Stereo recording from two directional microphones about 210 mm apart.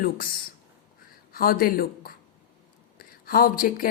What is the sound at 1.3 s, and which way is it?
A woman's voice, 45° left (ahead or behind).